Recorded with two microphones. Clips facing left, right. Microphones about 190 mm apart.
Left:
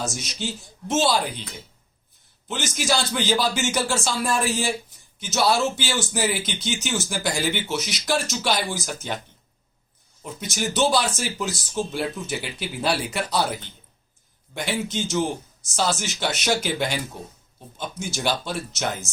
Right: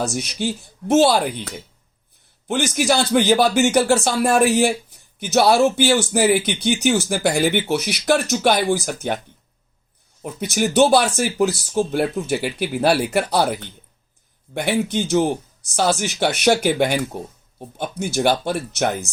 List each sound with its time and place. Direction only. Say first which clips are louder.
0.0 s speech: right 7 dB; 60° right (ahead or behind)
10.4 s speech: right 7 dB; 60° right (ahead or behind)